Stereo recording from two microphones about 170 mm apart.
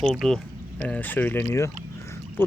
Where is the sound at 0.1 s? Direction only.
Centre (ahead or behind).